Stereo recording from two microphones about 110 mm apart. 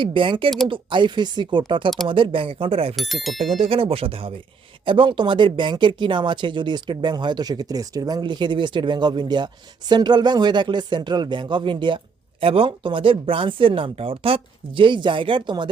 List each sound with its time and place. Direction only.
0.0 s speech: 50° right (ahead or behind)
2.9 s speech: centre (ahead or behind)
3.6 s speech: 55° right (ahead or behind)